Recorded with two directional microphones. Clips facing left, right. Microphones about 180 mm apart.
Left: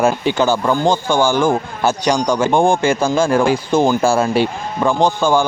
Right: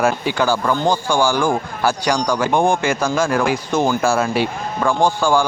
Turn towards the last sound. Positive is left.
turn(degrees=20)  # may be behind; listen again after turning